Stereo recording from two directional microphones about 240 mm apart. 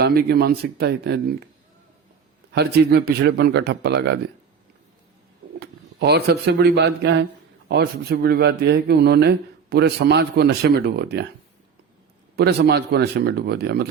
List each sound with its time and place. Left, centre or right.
0.0 s speech: right
2.6 s speech: right
5.5 s speech: right
12.4 s speech: right